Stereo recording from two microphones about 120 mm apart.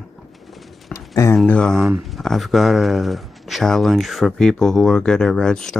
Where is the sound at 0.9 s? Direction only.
25° left (ahead or behind).